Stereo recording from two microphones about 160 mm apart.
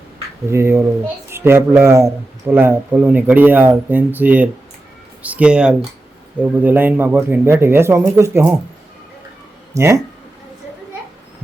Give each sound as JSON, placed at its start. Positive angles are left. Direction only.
{"t": 0.5, "sound": "a man's voice", "side_deg": -15}
{"t": 9.7, "sound": "a man's voice", "side_deg": -15}